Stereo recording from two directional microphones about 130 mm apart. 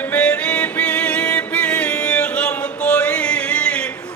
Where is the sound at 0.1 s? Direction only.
10° left (ahead or behind).